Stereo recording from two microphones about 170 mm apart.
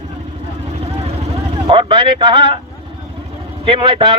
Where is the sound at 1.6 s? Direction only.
30° right (ahead or behind).